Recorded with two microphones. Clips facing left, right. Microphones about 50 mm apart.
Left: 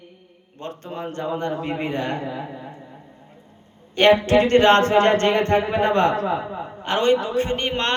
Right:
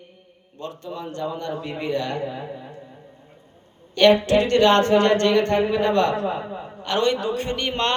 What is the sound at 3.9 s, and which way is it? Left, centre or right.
A man's voice, left.